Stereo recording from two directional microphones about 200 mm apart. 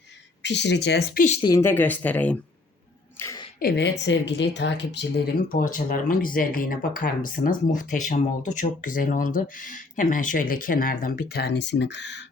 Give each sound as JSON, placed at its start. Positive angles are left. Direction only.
{"t": 0.4, "sound": "speech", "side_deg": 60}
{"t": 1.3, "sound": "speech", "side_deg": 25}
{"t": 1.5, "sound": "speech", "side_deg": 10}
{"t": 3.2, "sound": "a sound", "side_deg": 15}
{"t": 3.6, "sound": "speech", "side_deg": 55}